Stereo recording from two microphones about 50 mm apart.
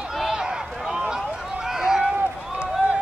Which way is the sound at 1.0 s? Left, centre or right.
Centre.